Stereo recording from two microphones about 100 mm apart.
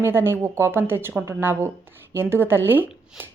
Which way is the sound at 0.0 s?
20° right (ahead or behind).